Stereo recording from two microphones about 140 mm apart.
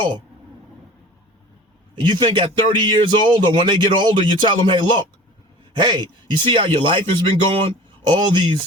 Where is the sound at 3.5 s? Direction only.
35° right (ahead or behind).